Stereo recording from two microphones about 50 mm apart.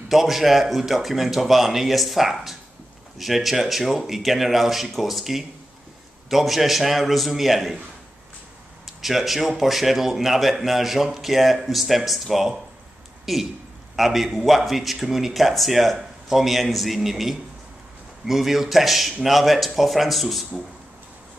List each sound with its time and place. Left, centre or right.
0.1 s a man's voice: centre
8.8 s a man's voice: centre